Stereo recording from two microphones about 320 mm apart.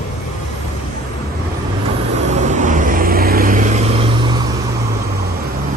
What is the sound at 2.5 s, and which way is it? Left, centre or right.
Vehicle, right.